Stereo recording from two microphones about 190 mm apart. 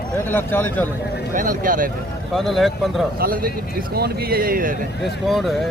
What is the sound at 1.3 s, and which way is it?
Speech, 45° right (ahead or behind).